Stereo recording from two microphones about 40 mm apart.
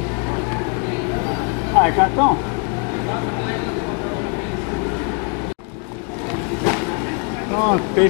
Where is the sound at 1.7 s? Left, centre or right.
Left.